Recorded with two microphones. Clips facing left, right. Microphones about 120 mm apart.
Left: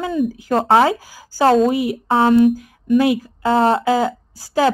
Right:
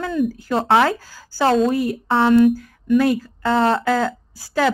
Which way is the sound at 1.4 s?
40° left (ahead or behind).